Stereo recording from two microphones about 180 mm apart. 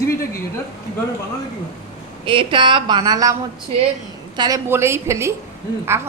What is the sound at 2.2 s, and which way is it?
A woman's voice, 30° right (ahead or behind).